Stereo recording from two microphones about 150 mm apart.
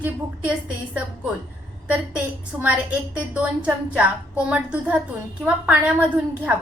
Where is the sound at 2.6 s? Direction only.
10° right (ahead or behind).